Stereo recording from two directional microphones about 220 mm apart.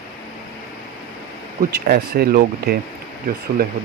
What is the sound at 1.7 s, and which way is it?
Speech, 45° right (ahead or behind).